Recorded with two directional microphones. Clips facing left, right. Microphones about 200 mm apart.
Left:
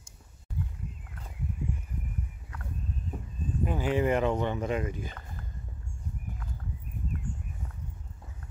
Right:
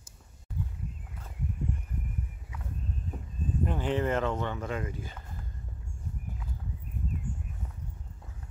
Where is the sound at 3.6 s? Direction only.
10° left (ahead or behind).